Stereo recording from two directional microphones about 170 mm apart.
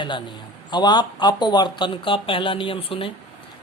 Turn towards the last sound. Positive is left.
turn(degrees=30)  # may be behind; listen again after turning